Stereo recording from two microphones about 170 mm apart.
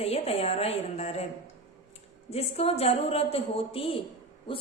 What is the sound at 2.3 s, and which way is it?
A woman's voice, 35° left (ahead or behind).